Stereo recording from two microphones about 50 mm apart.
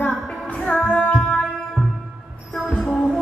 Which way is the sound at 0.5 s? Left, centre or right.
Left.